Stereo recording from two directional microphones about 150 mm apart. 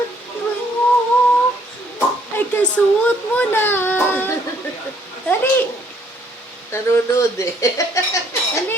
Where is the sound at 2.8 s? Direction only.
10° left (ahead or behind).